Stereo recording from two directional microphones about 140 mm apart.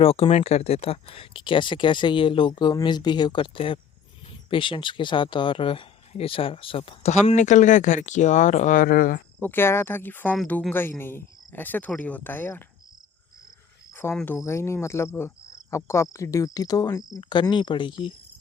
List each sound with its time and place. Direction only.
0.0 s speech: 45° left (ahead or behind)
7.1 s speech: 60° left (ahead or behind); by 9.2 s 90° left
9.4 s speech: 15° left (ahead or behind)
13.9 s cricket: 15° left (ahead or behind)
14.3 s speech: 20° left (ahead or behind); by 18.1 s 35° left (ahead or behind)